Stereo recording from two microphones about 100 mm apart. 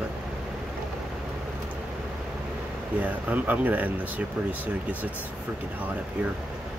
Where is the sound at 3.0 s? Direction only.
15° right (ahead or behind).